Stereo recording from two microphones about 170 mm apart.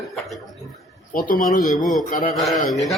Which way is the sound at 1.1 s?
55° left (ahead or behind).